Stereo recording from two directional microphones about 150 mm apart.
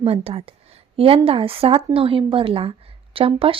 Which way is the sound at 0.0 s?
40° right (ahead or behind).